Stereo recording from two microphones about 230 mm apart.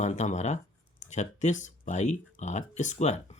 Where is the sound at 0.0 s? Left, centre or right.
Left.